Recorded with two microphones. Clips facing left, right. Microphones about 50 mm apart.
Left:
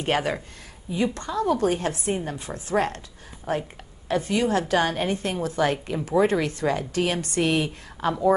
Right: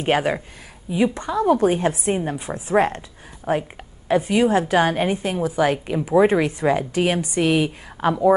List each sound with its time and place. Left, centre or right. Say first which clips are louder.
0.0 s a woman's voice: right 4 dB; centre